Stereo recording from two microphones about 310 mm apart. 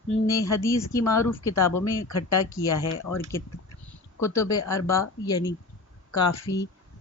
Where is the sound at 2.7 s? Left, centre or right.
Left.